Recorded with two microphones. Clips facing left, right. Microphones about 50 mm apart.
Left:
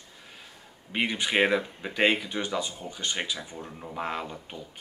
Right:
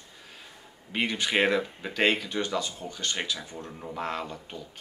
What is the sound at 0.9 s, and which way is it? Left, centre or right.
Speech, centre.